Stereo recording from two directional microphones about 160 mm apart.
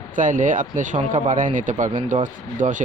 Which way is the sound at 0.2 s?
55° right (ahead or behind).